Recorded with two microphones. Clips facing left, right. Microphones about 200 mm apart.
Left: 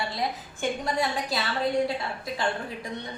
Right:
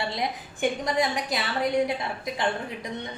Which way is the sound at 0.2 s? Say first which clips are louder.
Right 3 dB; 15° right (ahead or behind).